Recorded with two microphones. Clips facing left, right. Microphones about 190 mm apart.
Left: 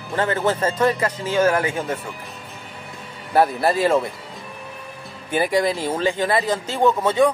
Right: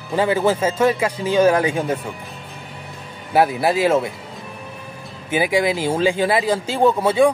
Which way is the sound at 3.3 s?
5° right (ahead or behind).